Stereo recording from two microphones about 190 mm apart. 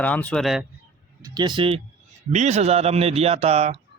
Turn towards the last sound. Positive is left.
turn(degrees=-35)  # may be behind; listen again after turning